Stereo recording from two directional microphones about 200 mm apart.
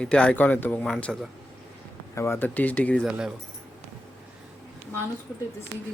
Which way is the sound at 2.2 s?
10° left (ahead or behind).